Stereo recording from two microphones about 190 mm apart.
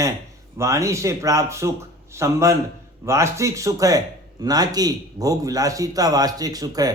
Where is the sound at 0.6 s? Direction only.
15° right (ahead or behind).